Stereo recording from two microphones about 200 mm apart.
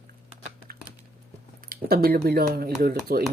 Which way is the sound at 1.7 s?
50° right (ahead or behind).